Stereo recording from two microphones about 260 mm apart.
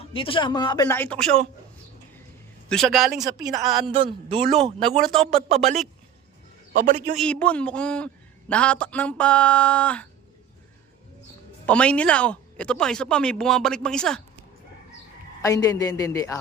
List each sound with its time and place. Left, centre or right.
0.0 s speech: centre
2.6 s a man's voice: centre
3.2 s a woman's voice: centre
3.6 s a man's voice: centre
3.8 s a man's voice: centre
4.9 s a man's voice: centre
6.7 s a man's voice: right
7.2 s a man's voice: centre
11.6 s a man's voice: centre
15.4 s speech: centre